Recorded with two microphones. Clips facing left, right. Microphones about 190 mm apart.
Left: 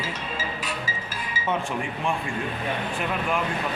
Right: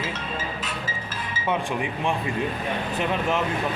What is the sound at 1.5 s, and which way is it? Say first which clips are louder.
Speech: right 2 dB; 15° right (ahead or behind).